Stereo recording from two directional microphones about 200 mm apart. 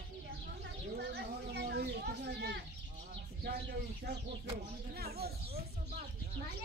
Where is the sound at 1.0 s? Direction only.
60° right (ahead or behind).